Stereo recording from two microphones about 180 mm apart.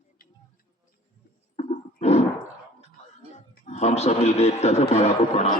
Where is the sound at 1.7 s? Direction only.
35° left (ahead or behind).